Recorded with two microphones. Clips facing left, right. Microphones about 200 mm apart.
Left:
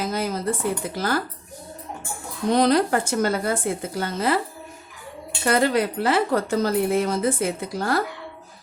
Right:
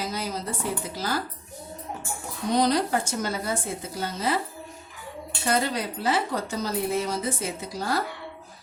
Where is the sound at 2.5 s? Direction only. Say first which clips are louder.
Left 4 dB; 60° left (ahead or behind).